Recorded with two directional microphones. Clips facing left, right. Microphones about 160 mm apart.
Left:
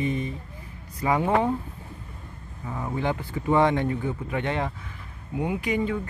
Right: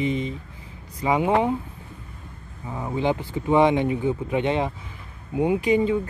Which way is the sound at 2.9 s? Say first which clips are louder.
Right 5 dB; 20° right (ahead or behind).